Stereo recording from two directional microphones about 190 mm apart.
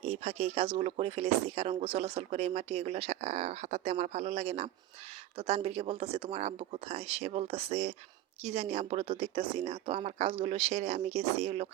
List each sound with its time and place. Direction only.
0.0 s speech: 35° right (ahead or behind)